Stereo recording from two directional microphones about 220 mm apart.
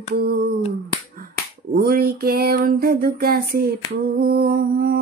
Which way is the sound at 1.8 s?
40° right (ahead or behind).